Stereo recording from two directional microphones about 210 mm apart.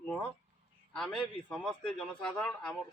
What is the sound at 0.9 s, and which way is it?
A man's voice, centre (ahead or behind).